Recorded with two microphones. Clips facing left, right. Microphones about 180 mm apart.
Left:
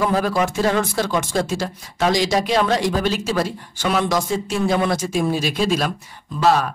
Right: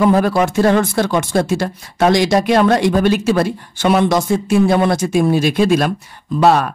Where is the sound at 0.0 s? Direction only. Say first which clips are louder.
Right 6 dB; 60° right (ahead or behind).